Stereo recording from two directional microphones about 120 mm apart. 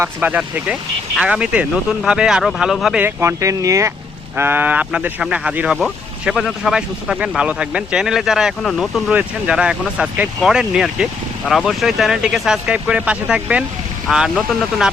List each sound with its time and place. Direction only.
0.0 s speech: 10° right (ahead or behind)
3.0 s speech: 20° right (ahead or behind); by 14.8 s 5° right (ahead or behind)